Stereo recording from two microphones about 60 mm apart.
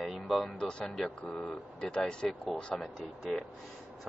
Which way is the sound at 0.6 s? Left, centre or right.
Centre.